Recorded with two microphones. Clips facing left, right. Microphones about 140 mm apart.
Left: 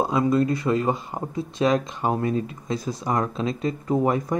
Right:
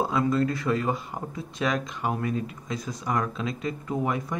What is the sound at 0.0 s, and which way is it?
Speech, 20° left (ahead or behind).